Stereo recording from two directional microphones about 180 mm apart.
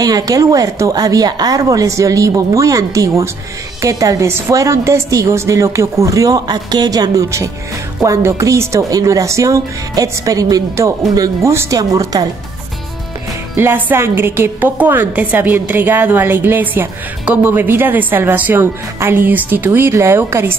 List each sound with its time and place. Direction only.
0.0 s a woman's voice: 20° right (ahead or behind)
13.6 s a woman's voice: 10° right (ahead or behind)